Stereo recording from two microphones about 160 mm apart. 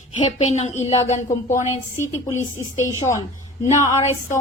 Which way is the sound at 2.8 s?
20° left (ahead or behind).